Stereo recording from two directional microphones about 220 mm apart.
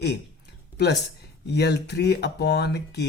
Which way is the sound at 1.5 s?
50° left (ahead or behind).